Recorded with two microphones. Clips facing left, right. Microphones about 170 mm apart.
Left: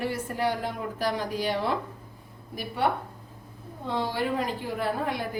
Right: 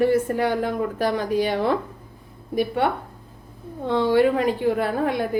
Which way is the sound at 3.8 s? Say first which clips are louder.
Right 10 dB; 65° right (ahead or behind).